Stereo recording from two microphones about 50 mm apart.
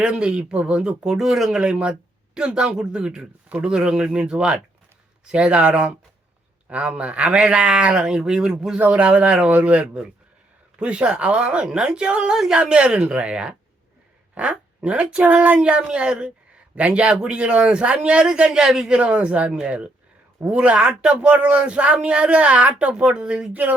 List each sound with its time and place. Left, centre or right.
0.0 s a man's voice: right
18.9 s a man's voice: right